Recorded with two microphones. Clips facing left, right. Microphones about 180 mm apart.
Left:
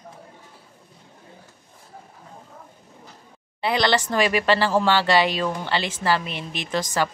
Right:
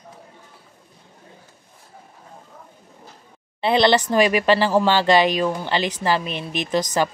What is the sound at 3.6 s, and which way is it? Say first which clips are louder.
A woman's voice: right 4 dB; 25° right (ahead or behind).